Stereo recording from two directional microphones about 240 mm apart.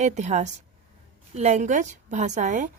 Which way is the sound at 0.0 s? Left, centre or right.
Right.